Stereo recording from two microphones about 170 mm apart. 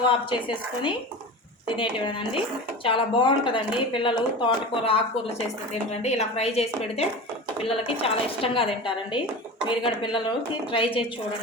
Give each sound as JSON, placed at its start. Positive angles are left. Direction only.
{"t": 0.0, "sound": "a woman's voice", "side_deg": 30}